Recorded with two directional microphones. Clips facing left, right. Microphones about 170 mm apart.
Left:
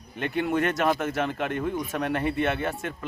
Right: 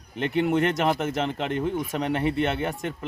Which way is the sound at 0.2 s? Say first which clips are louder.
Right 3 dB; 20° right (ahead or behind).